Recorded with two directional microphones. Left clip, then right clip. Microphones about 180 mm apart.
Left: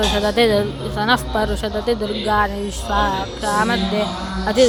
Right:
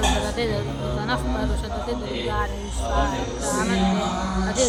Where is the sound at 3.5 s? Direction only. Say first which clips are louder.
Left 8 dB; 45° left (ahead or behind).